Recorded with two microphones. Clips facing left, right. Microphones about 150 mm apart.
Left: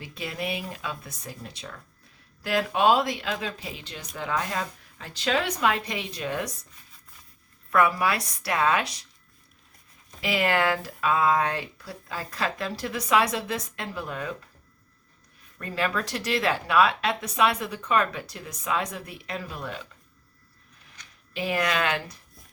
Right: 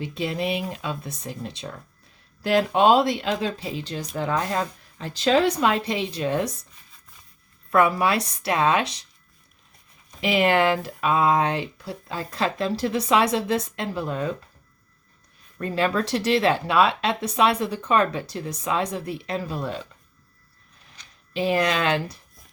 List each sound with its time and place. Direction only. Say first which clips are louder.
0.0 s speech: right 7 dB; 25° right (ahead or behind)
7.7 s speech: right 3 dB; 25° right (ahead or behind)
10.2 s speech: right 5 dB; 25° right (ahead or behind)
15.5 s speech: right 5 dB; 30° right (ahead or behind)
21.0 s speech: right 6 dB; 30° right (ahead or behind)